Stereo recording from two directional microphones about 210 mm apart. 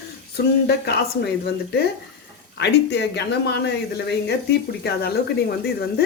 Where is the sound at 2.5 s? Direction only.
55° left (ahead or behind).